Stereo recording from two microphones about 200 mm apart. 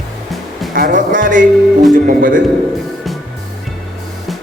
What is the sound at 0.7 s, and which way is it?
Music, 45° right (ahead or behind).